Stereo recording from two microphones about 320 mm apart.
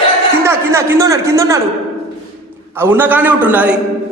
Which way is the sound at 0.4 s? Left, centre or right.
Centre.